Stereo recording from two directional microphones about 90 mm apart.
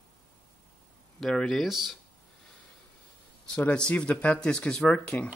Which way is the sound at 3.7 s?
10° left (ahead or behind).